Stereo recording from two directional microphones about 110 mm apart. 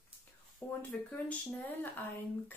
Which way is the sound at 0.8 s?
15° left (ahead or behind).